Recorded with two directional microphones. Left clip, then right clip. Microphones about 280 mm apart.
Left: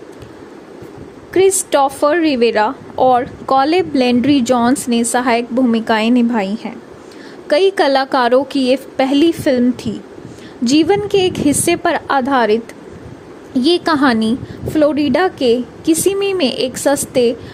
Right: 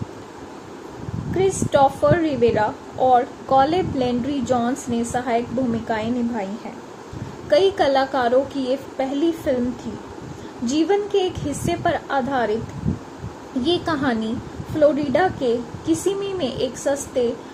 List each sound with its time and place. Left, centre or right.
1.3 s a woman's voice: left
7.5 s a woman's voice: left
10.7 s a woman's voice: left
13.6 s a woman's voice: left